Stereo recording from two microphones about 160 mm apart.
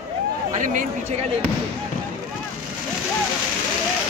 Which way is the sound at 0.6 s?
55° right (ahead or behind).